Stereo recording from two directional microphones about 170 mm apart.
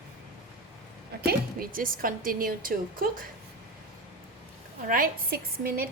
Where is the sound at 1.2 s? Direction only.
65° right (ahead or behind).